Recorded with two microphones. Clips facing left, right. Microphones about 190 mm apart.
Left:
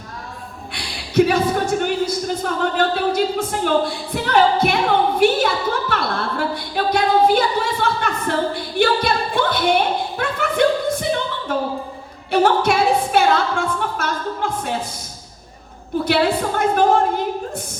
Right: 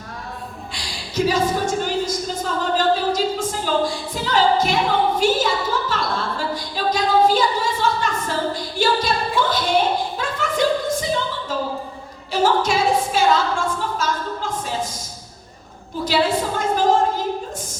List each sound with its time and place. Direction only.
0.7 s speech: 60° left (ahead or behind)
5.9 s a sound: 60° left (ahead or behind)
16.0 s speech: 60° left (ahead or behind)